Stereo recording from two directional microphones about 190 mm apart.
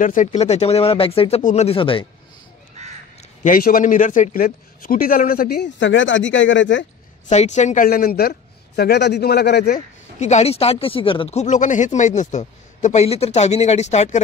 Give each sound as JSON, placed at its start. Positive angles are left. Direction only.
{"t": 0.0, "sound": "speech", "side_deg": 40}
{"t": 2.8, "sound": "crow", "side_deg": -35}
{"t": 3.4, "sound": "a man's voice", "side_deg": 50}
{"t": 7.2, "sound": "a man's voice", "side_deg": 35}
{"t": 10.1, "sound": "speech", "side_deg": 35}